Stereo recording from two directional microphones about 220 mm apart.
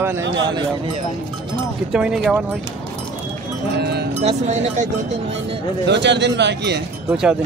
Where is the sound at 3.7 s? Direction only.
45° right (ahead or behind).